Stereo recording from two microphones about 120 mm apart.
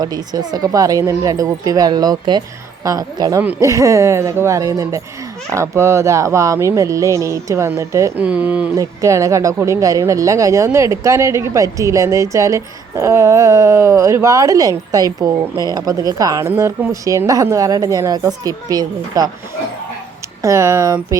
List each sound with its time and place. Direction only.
0.0 s speech: 35° right (ahead or behind)
8.2 s speech: 10° right (ahead or behind)
8.7 s speech: 25° right (ahead or behind)
20.4 s speech: 25° right (ahead or behind)